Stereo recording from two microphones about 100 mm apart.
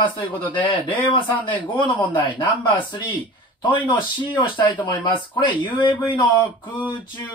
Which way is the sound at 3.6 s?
50° left (ahead or behind).